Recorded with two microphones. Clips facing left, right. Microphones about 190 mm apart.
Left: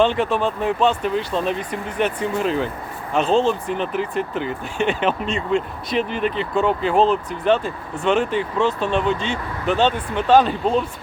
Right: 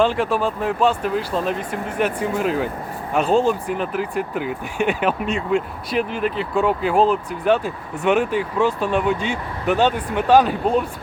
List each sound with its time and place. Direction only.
0.0 s speech: 5° right (ahead or behind)